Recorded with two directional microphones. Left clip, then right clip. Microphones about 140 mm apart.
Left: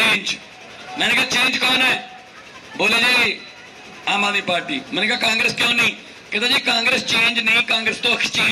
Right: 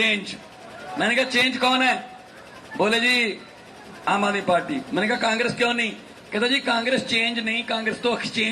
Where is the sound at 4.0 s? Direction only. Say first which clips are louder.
Left 3 dB; 45° right (ahead or behind).